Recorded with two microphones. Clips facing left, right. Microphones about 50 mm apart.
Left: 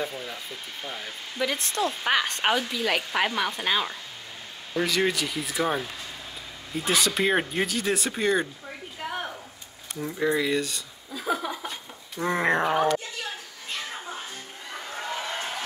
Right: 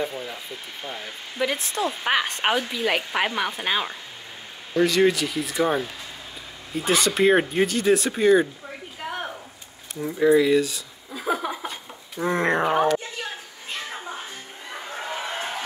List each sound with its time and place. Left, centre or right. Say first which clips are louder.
0.0 s speech: right 3 dB; centre
4.7 s speech: right 6 dB; centre
11.1 s chuckle: right 2 dB; centre
11.6 s a sound: right 2 dB; centre
13.7 s music: right 2 dB; centre
14.7 s a sound: right 1 dB; centre